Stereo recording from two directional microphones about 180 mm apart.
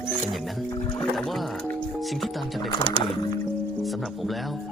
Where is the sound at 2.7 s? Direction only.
25° left (ahead or behind).